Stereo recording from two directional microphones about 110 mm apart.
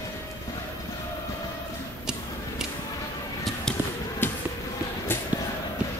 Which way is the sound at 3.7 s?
5° left (ahead or behind).